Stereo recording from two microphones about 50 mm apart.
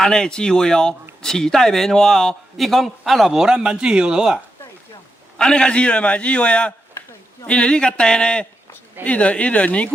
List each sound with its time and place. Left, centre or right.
0.0 s a man's voice: centre
3.5 s speech: centre
5.4 s a man's voice: centre